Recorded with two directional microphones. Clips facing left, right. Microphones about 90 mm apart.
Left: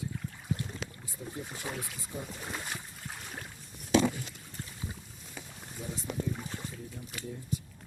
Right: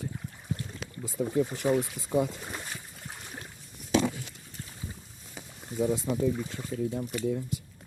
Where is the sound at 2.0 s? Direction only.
90° right.